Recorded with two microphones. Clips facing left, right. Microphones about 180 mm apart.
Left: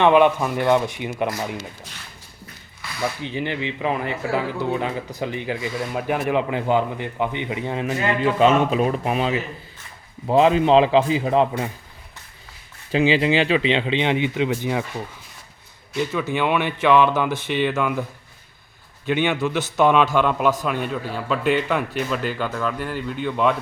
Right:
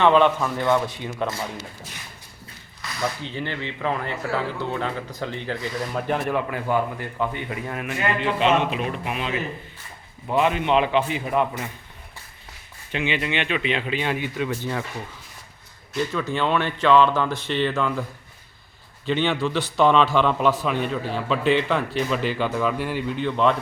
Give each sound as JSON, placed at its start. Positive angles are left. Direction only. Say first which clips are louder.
{"t": 0.0, "sound": "speech", "louder": "left 2 dB", "side_deg": 15}
{"t": 3.2, "sound": "speech", "louder": "left 4 dB", "side_deg": 15}
{"t": 5.5, "sound": "speech", "louder": "left 1 dB", "side_deg": 5}
{"t": 6.3, "sound": "speech", "louder": "left 3 dB", "side_deg": 20}
{"t": 8.8, "sound": "speech", "louder": "left 7 dB", "side_deg": 40}
{"t": 12.9, "sound": "speech", "louder": "left 8 dB", "side_deg": 30}
{"t": 16.0, "sound": "speech", "louder": "left 2 dB", "side_deg": 15}
{"t": 19.0, "sound": "a man's voice", "louder": "left 1 dB", "side_deg": 10}
{"t": 22.4, "sound": "speech", "louder": "right 2 dB", "side_deg": -5}
{"t": 23.1, "sound": "a man's voice", "louder": "even", "side_deg": 5}